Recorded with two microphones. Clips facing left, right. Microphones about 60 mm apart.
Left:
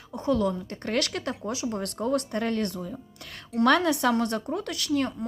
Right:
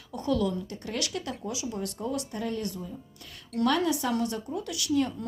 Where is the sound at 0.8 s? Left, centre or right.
Left.